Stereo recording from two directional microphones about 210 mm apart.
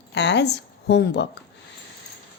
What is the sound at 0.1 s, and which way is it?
A woman's voice, 55° left (ahead or behind).